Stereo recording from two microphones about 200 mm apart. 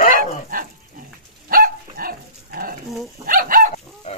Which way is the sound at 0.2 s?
45° right (ahead or behind).